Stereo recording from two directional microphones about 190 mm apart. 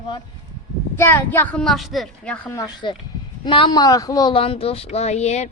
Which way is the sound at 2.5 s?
25° left (ahead or behind).